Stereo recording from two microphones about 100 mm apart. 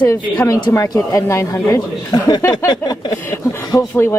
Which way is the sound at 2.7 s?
45° left (ahead or behind).